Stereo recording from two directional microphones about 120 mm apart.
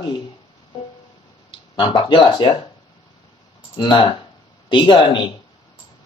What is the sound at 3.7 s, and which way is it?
Speech, 40° left (ahead or behind).